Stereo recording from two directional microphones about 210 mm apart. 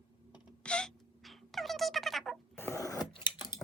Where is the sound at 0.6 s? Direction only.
5° left (ahead or behind).